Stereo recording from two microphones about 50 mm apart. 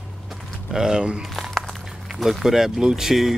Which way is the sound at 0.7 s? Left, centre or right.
Centre.